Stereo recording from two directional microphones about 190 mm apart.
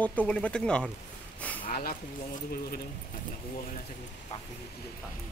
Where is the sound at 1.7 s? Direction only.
50° left (ahead or behind).